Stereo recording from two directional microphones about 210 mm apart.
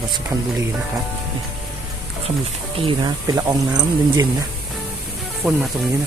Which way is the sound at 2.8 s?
25° right (ahead or behind).